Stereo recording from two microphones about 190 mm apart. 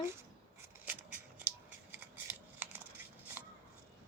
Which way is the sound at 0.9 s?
10° right (ahead or behind).